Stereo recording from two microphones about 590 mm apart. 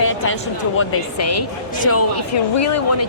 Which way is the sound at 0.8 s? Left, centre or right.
Left.